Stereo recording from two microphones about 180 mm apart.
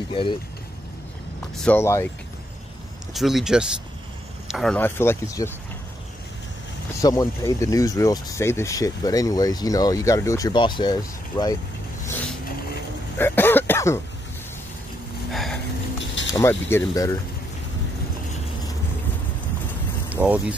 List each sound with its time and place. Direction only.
0.1 s speech: 30° left (ahead or behind)
1.6 s speech: 10° left (ahead or behind)
3.1 s speech: centre (ahead or behind)
4.7 s speech: 10° left (ahead or behind)
7.0 s speech: 20° left (ahead or behind)
13.2 s cough: 10° left (ahead or behind)
15.3 s a sound: centre (ahead or behind)
16.3 s speech: 15° left (ahead or behind)
20.1 s speech: 5° right (ahead or behind)